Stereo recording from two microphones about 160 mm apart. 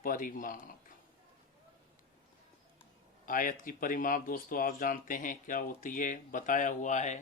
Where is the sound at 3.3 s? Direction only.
55° left (ahead or behind).